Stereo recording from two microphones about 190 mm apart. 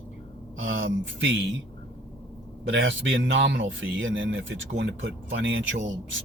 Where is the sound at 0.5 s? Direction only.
90° right; by 1.6 s 75° right (ahead or behind).